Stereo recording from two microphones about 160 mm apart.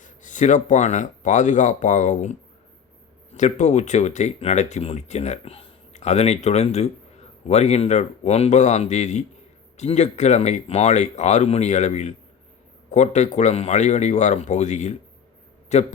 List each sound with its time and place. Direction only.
0.0 s speech: 50° left (ahead or behind)
3.3 s speech: 50° left (ahead or behind)